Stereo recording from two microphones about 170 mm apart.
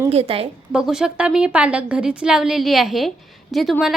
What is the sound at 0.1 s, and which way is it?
Speech, 35° right (ahead or behind).